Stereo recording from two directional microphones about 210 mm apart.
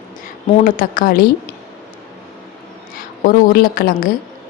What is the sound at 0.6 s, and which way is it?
Speech, 40° left (ahead or behind).